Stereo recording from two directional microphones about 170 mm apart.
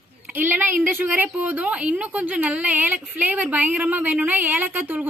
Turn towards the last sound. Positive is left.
turn(degrees=-10)  # may be behind; listen again after turning